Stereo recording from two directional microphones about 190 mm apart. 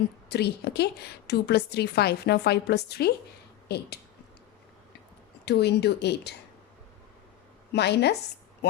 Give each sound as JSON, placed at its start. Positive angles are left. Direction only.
{"t": 0.3, "sound": "a woman's voice", "side_deg": 60}
{"t": 5.5, "sound": "a woman's voice", "side_deg": 60}
{"t": 7.7, "sound": "a woman's voice", "side_deg": 60}